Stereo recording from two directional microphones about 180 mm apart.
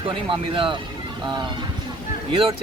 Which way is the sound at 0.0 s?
30° right (ahead or behind).